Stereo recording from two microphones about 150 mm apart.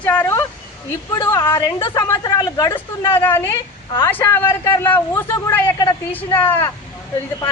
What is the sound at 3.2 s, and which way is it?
A woman's voice, 15° left (ahead or behind).